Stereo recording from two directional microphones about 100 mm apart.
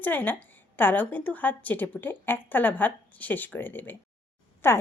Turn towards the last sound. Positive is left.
turn(degrees=25)  # may be behind; listen again after turning